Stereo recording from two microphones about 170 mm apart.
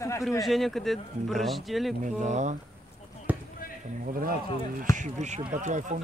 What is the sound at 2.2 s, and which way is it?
Speech, 45° right (ahead or behind).